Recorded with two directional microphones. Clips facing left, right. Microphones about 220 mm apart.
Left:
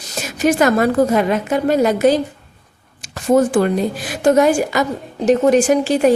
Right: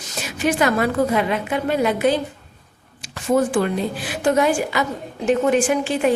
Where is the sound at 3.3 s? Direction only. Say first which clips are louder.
Left 5 dB; 45° left (ahead or behind).